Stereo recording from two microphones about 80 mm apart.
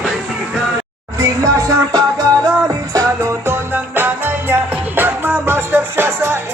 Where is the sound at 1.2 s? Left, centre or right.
Right.